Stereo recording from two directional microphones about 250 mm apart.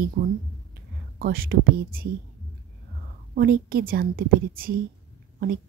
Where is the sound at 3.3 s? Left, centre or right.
Right.